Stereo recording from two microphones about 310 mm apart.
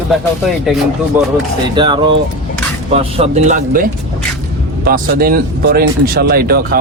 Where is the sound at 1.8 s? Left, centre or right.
Centre.